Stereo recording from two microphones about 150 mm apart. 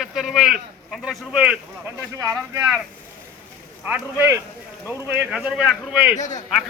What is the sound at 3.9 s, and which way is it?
Speech, 15° right (ahead or behind).